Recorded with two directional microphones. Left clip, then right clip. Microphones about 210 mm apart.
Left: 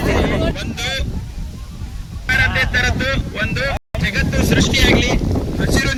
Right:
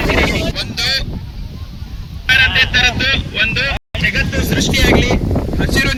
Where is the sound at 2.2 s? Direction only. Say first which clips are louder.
Right 5 dB; 15° left (ahead or behind).